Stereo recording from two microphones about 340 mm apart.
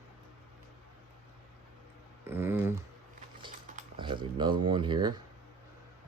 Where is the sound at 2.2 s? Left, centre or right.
Centre.